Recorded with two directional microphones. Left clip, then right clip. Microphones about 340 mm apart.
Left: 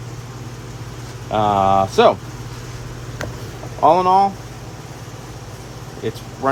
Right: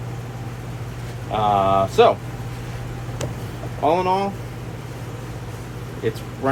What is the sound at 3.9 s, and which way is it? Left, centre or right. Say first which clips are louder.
Speech: left 6 dB; centre.